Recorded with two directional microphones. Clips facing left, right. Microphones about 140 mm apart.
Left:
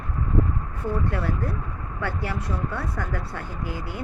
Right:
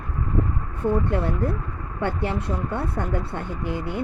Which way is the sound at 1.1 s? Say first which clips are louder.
Right 4 dB; 25° right (ahead or behind).